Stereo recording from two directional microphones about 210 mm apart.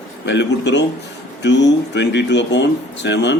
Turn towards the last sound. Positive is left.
turn(degrees=55)  # may be behind; listen again after turning